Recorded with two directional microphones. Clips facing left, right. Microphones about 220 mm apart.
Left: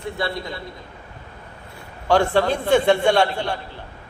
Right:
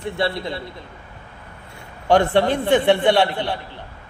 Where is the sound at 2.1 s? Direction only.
20° right (ahead or behind).